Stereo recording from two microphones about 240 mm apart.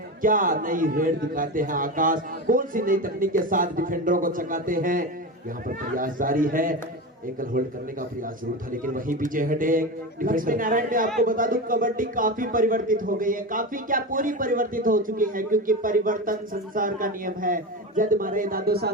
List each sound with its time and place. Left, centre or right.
0.2 s speech: right
8.7 s speech: right